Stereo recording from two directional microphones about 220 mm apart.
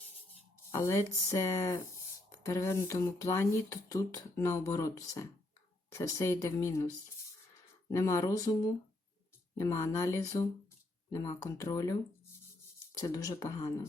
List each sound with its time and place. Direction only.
0.7 s speech: 15° left (ahead or behind)
7.9 s speech: 15° left (ahead or behind)